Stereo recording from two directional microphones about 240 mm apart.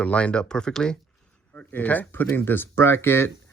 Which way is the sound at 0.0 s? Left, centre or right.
Centre.